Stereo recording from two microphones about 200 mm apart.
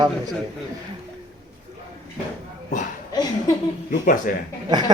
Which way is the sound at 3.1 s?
20° left (ahead or behind).